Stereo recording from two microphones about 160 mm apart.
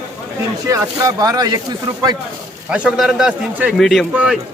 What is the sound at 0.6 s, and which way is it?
Speech, 20° right (ahead or behind).